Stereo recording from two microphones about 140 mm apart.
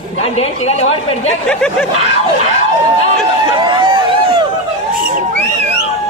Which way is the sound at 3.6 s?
35° right (ahead or behind).